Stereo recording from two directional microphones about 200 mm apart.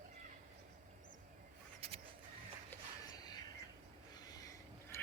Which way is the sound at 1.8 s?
30° right (ahead or behind).